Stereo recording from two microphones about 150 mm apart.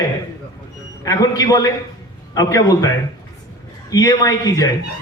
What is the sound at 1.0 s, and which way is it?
A man's voice, 25° left (ahead or behind).